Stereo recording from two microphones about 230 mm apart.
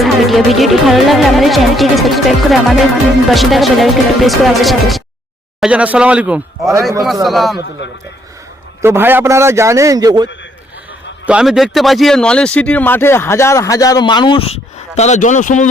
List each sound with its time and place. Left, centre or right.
0.0 s speech: centre
8.8 s a man's voice: centre
11.3 s speech: centre; by 15.7 s left